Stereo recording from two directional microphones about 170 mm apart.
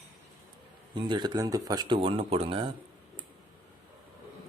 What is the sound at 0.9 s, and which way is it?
Speech, 25° right (ahead or behind).